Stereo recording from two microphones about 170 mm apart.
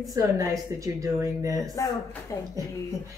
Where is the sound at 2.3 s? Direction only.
20° left (ahead or behind).